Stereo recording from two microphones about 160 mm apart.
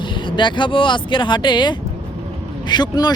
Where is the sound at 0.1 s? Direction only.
30° left (ahead or behind).